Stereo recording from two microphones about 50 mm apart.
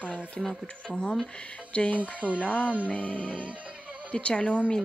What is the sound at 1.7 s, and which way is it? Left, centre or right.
Speech, left.